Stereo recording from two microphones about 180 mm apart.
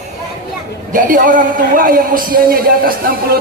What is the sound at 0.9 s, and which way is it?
A man's voice, 45° right (ahead or behind).